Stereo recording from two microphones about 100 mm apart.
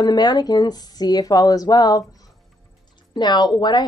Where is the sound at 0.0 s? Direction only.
45° left (ahead or behind).